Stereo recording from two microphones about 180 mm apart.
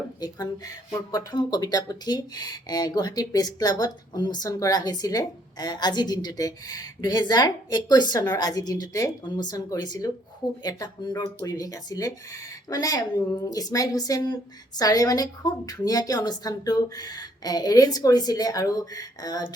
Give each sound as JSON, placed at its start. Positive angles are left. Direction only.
{"t": 0.2, "sound": "speech", "side_deg": 20}